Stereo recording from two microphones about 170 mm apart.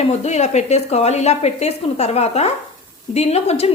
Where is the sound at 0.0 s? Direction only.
40° left (ahead or behind).